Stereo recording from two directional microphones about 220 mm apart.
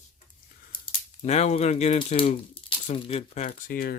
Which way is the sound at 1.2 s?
30° left (ahead or behind).